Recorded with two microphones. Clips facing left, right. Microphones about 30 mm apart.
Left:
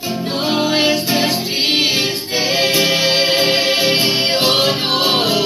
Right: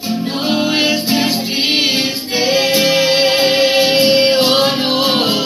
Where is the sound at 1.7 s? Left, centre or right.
Right.